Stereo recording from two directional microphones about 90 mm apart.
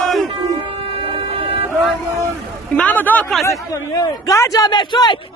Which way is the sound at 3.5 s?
40° left (ahead or behind).